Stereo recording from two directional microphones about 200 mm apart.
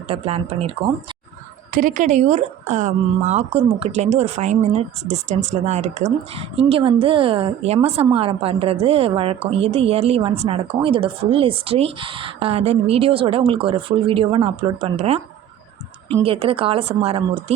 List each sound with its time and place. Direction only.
0.1 s speech: 30° right (ahead or behind)
1.7 s speech: 40° right (ahead or behind)
16.2 s speech: 30° right (ahead or behind)